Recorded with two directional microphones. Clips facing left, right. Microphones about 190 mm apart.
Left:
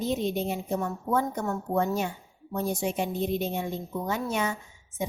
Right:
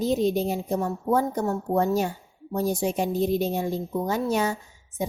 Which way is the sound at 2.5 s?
35° right (ahead or behind).